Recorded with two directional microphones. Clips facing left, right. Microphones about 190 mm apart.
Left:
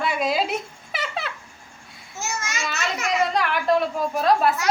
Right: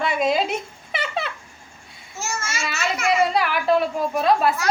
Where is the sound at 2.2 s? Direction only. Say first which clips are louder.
Right 1 dB; 15° left (ahead or behind).